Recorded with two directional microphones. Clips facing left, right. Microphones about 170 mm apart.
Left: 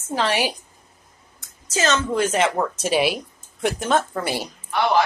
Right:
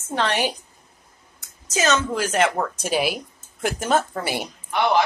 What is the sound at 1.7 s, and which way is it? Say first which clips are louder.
Speech: even; 15° right (ahead or behind).